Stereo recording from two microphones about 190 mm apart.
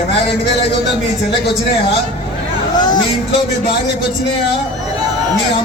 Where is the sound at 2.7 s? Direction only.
20° left (ahead or behind).